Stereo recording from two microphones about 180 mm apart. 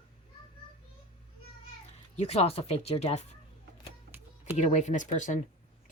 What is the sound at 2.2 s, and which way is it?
Speech, 35° left (ahead or behind).